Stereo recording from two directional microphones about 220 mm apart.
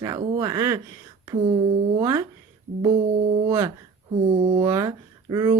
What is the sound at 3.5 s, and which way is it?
Speech, 15° right (ahead or behind).